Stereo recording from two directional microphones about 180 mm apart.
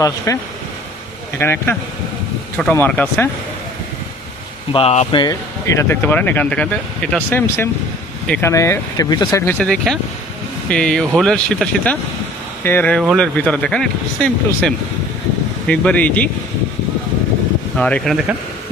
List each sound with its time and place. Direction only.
0.0 s speech: 15° left (ahead or behind)
1.4 s speech: 10° left (ahead or behind)
4.7 s speech: 30° left (ahead or behind)
9.5 s speech: 5° left (ahead or behind)
17.7 s speech: 5° left (ahead or behind)